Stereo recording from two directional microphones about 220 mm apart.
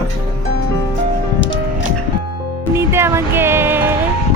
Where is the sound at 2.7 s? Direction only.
10° right (ahead or behind).